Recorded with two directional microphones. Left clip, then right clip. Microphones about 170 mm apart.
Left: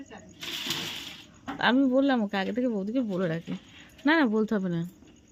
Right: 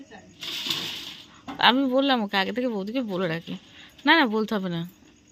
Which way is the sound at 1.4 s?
10° left (ahead or behind).